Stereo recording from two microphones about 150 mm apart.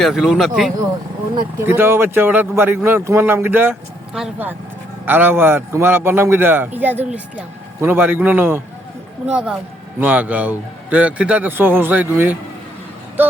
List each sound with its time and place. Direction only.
0.0 s a man's voice: centre (ahead or behind)
1.5 s a man's voice: 15° right (ahead or behind)